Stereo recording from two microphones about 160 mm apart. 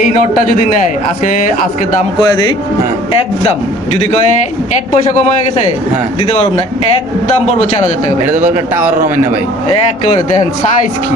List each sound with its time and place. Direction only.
0.0 s a man's voice: 55° left (ahead or behind)
2.2 s speech: 25° left (ahead or behind)
7.4 s a man's voice: 45° left (ahead or behind)
8.5 s speech: 10° right (ahead or behind)